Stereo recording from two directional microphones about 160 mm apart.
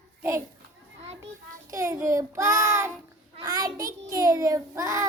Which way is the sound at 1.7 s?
20° right (ahead or behind).